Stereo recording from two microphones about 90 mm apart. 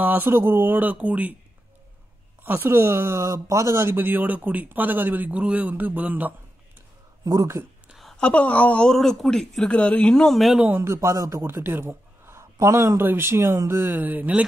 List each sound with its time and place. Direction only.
0.0 s speech: 20° right (ahead or behind)
2.4 s speech: 25° right (ahead or behind)
7.2 s speech: 35° right (ahead or behind)
7.9 s a sound: centre (ahead or behind)
8.2 s speech: 15° left (ahead or behind)
9.7 s speech: 15° left (ahead or behind)
10.8 s a man's voice: 30° right (ahead or behind)